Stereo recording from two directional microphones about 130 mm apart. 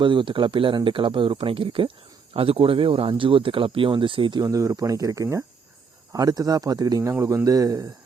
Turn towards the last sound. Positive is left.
turn(degrees=-25)  # may be behind; listen again after turning